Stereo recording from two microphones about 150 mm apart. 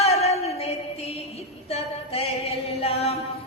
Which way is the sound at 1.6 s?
40° left (ahead or behind).